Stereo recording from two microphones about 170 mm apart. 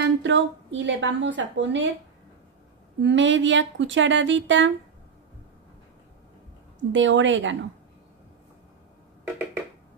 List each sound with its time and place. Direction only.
0.0 s a woman's voice: 90° right
3.0 s speech: 90° right
6.9 s speech: 90° right